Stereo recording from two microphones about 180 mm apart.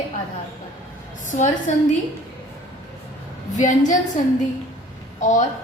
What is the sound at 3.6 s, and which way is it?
Speech, 45° left (ahead or behind).